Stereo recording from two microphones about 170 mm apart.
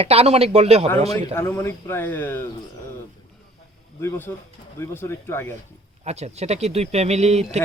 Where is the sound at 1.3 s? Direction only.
15° left (ahead or behind).